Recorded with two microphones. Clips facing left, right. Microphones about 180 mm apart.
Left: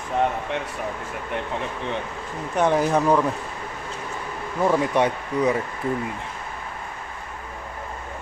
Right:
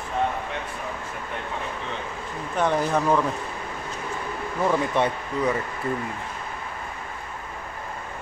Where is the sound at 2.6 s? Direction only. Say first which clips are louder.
Left 3 dB; 15° left (ahead or behind).